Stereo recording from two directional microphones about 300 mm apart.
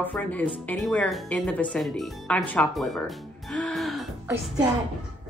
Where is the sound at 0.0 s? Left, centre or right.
Centre.